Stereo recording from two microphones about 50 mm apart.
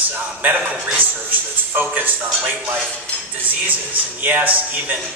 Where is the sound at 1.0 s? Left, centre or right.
Right.